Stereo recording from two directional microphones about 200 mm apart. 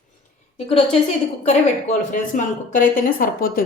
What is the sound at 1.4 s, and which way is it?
A woman's voice, 35° left (ahead or behind).